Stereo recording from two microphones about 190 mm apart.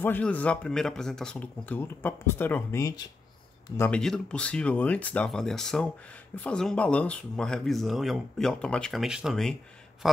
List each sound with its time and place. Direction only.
0.0 s speech: 10° left (ahead or behind)
3.9 s speech: 5° left (ahead or behind)